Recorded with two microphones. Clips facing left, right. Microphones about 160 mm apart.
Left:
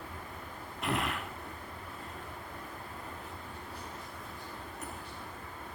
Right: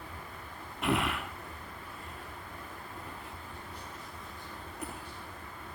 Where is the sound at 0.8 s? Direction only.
35° left (ahead or behind).